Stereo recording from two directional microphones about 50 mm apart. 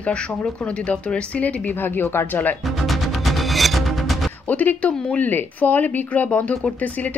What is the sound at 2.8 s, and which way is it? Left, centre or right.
Music, centre.